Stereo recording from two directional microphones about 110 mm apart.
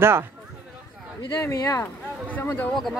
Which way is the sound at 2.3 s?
15° left (ahead or behind).